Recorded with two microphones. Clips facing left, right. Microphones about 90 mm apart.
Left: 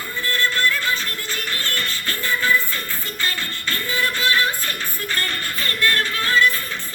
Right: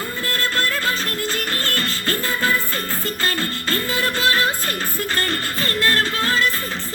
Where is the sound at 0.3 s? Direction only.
40° right (ahead or behind).